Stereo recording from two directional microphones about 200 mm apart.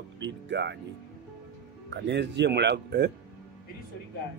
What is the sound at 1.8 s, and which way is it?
Speech, 60° right (ahead or behind).